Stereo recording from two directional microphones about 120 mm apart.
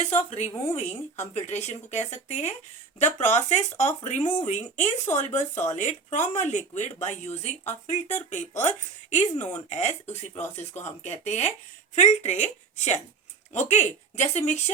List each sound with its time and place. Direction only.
0.0 s a woman's voice: 65° left (ahead or behind); by 6.8 s 80° left
7.0 s speech: 70° left (ahead or behind)